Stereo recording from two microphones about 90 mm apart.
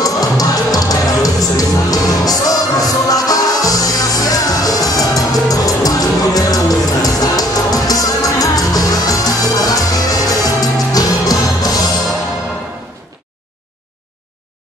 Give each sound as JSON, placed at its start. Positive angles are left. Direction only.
{"t": 0.0, "sound": "music", "side_deg": 45}